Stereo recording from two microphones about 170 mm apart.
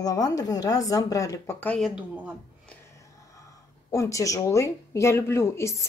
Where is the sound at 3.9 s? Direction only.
20° left (ahead or behind).